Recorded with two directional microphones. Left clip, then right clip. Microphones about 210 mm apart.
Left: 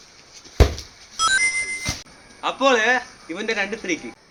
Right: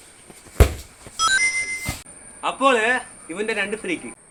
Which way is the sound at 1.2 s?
Centre (ahead or behind).